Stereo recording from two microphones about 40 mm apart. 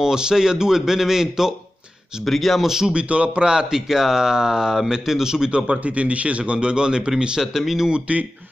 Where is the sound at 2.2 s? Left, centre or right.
Centre.